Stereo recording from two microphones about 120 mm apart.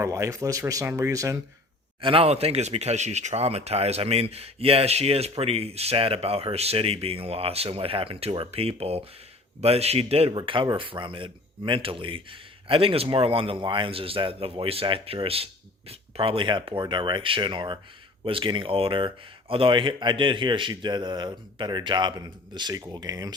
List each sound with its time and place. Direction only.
0.0 s speech: 25° right (ahead or behind)
2.0 s speech: 50° right (ahead or behind)
10.3 s speech: 45° right (ahead or behind)